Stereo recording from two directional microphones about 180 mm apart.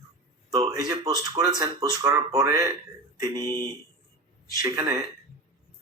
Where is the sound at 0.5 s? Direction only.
20° right (ahead or behind).